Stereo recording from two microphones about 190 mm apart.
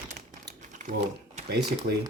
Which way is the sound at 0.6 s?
40° right (ahead or behind).